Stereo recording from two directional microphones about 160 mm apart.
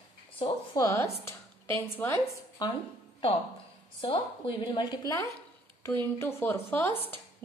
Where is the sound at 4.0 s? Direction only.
30° left (ahead or behind); by 7.0 s 15° left (ahead or behind).